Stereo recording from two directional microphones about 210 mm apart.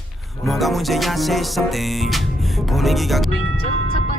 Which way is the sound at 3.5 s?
70° right (ahead or behind).